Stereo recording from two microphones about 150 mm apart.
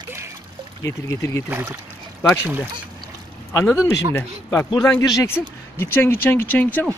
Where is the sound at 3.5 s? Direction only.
20° left (ahead or behind).